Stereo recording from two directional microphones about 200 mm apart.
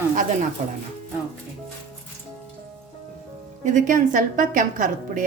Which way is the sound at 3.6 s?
40° right (ahead or behind).